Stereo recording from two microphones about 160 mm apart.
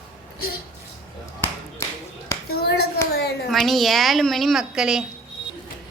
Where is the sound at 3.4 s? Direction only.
Centre (ahead or behind).